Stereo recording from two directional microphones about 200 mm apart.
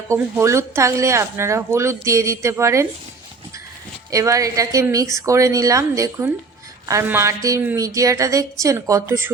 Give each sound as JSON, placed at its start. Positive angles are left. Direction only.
{"t": 0.1, "sound": "speech", "side_deg": -15}
{"t": 4.1, "sound": "speech", "side_deg": -15}